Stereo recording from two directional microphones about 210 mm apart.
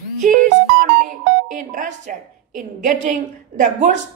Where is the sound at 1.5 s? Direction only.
35° right (ahead or behind).